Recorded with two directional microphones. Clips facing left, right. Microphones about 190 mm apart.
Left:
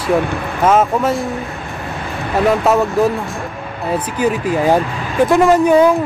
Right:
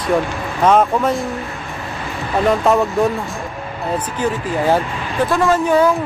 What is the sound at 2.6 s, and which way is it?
Speech, centre (ahead or behind).